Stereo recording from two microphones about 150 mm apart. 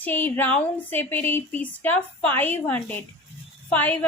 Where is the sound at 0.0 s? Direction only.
10° left (ahead or behind).